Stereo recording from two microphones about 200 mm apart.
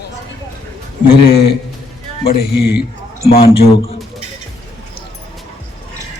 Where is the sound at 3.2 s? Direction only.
30° left (ahead or behind).